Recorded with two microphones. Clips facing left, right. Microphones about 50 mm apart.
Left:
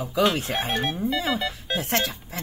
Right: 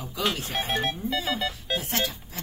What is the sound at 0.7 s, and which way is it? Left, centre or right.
Speech, centre.